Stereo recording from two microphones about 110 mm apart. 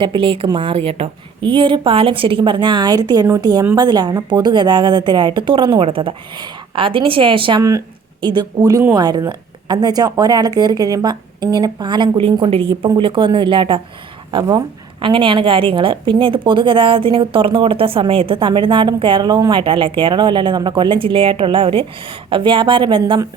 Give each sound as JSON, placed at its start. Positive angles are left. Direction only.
{"t": 0.0, "sound": "a woman's voice", "side_deg": -50}
{"t": 1.4, "sound": "a woman's voice", "side_deg": -50}
{"t": 12.1, "sound": "a woman's voice", "side_deg": -55}